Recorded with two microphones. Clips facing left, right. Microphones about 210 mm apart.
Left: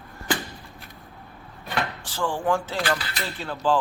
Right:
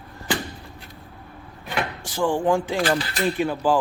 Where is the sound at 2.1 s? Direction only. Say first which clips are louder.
Right 5 dB; 15° right (ahead or behind).